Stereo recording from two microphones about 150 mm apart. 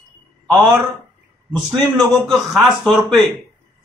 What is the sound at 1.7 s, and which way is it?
Speech, centre (ahead or behind).